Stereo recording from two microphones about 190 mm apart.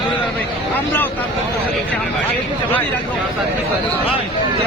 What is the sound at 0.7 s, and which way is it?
Vehicle, 10° left (ahead or behind).